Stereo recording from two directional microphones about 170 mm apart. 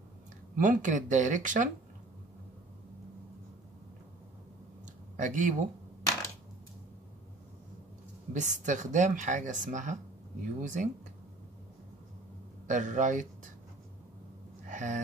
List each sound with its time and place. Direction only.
0.6 s speech: 50° right (ahead or behind)
5.1 s speech: 50° right (ahead or behind)
8.3 s speech: 45° right (ahead or behind)
12.6 s speech: 45° right (ahead or behind)
14.7 s a sound: 45° right (ahead or behind)